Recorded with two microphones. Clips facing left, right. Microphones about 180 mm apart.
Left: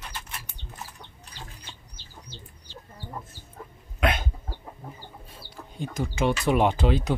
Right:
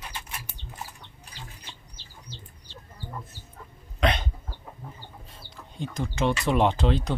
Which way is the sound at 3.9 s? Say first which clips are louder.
Even; 5° left (ahead or behind).